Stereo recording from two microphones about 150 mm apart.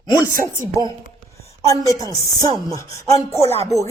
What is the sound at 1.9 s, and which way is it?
Chopping, 25° right (ahead or behind).